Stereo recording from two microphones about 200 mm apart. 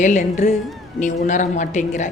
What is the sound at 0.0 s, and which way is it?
A woman's voice, 35° left (ahead or behind).